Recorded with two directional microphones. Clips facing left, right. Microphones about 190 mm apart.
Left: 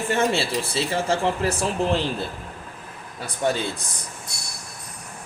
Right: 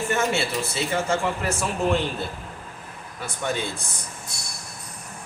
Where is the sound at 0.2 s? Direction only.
30° left (ahead or behind).